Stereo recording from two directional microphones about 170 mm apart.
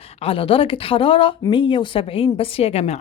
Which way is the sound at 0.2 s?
30° left (ahead or behind).